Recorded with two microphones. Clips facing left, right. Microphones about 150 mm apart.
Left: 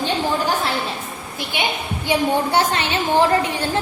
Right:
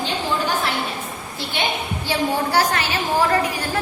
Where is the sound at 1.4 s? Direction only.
15° left (ahead or behind).